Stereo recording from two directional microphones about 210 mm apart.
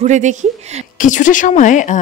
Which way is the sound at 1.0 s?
35° left (ahead or behind).